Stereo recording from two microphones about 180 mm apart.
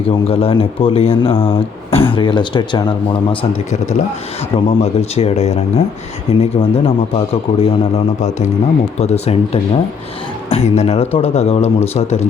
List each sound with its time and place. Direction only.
0.3 s speech: 30° left (ahead or behind)
3.7 s speech: 40° left (ahead or behind)